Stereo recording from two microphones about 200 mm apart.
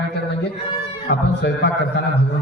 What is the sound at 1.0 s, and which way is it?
Speech, 55° left (ahead or behind).